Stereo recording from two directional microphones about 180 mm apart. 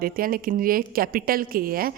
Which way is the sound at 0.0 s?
55° right (ahead or behind).